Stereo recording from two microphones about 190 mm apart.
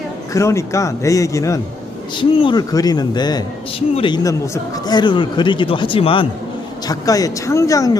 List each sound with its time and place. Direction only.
0.3 s a man's voice: 15° left (ahead or behind)